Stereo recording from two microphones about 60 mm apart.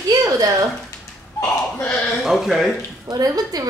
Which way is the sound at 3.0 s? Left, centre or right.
Right.